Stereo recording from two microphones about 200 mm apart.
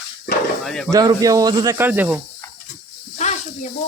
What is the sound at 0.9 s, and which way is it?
Speech, 20° right (ahead or behind).